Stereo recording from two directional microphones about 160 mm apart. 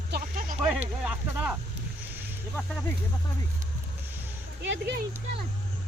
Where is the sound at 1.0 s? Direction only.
5° right (ahead or behind).